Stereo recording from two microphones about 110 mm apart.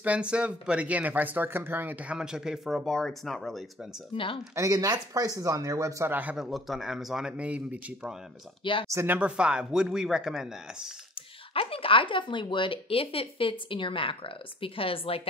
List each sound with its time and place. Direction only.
0.0 s speech: 10° right (ahead or behind)
4.1 s speech: 55° left (ahead or behind)
4.6 s speech: 30° right (ahead or behind)
6.1 s speech: 10° right (ahead or behind)
8.8 s speech: 25° right (ahead or behind)
9.1 s speech: 10° right (ahead or behind)
11.5 s speech: 60° left (ahead or behind)